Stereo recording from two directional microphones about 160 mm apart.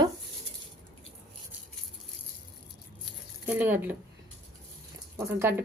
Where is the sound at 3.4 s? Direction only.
10° right (ahead or behind).